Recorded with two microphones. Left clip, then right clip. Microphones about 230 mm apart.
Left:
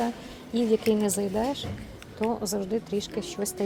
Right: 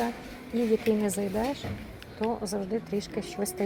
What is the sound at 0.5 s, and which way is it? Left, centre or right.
A woman's voice, centre.